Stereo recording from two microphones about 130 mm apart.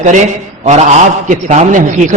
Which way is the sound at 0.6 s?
65° right (ahead or behind).